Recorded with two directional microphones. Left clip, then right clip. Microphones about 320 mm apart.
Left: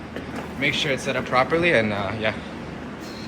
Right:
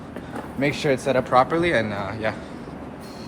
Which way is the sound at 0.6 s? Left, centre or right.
Centre.